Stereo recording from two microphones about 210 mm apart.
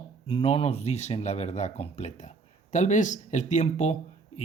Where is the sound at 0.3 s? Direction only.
25° left (ahead or behind).